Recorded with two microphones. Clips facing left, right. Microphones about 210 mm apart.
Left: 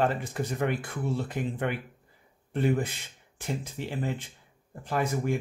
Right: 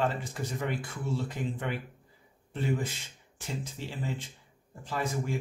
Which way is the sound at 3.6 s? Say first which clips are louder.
Left 4 dB; 55° left (ahead or behind).